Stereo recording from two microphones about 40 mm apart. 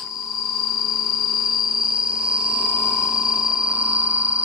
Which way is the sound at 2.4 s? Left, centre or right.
Right.